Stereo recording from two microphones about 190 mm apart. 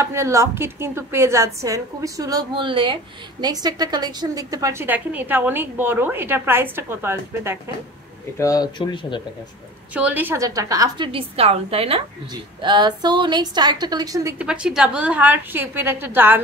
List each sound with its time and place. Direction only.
0.0 s a woman's voice: 15° right (ahead or behind)
8.4 s speech: 20° left (ahead or behind)
9.9 s a woman's voice: 10° right (ahead or behind)
14.4 s a woman's voice: 5° right (ahead or behind)